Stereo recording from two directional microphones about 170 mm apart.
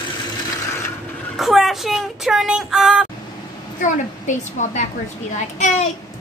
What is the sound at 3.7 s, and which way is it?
A woman's voice, 50° left (ahead or behind).